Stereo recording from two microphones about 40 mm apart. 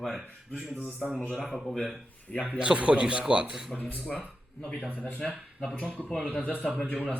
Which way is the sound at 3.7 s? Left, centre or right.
Left.